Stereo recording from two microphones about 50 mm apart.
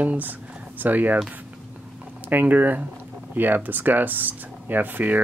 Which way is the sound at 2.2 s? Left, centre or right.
Right.